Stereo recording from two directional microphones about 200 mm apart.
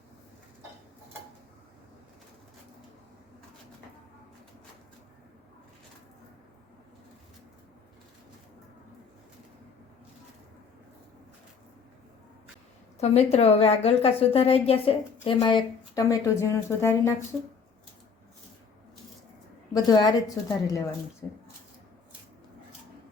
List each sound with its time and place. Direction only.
13.0 s a woman's voice: 30° left (ahead or behind); by 17.2 s 15° left (ahead or behind)
19.7 s a woman's voice: 20° left (ahead or behind)